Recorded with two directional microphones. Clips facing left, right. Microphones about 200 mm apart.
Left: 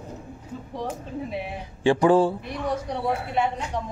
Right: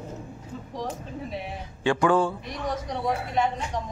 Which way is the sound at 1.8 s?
30° left (ahead or behind).